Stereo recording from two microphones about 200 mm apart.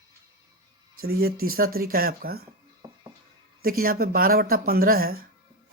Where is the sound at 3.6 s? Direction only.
45° right (ahead or behind).